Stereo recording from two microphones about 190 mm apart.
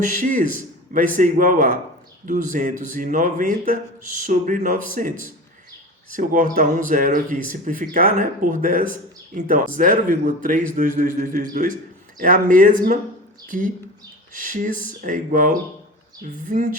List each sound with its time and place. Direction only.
0.0 s speech: 45° right (ahead or behind)